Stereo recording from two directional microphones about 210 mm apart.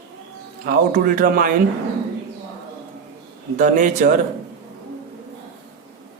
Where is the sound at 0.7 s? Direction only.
45° right (ahead or behind).